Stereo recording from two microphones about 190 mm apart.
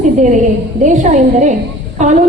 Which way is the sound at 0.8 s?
40° right (ahead or behind).